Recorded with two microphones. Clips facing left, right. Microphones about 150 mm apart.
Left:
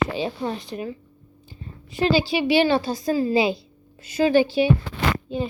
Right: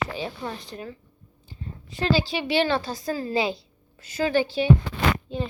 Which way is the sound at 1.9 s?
15° left (ahead or behind).